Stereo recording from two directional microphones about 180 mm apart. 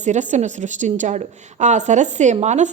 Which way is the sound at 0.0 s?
40° right (ahead or behind).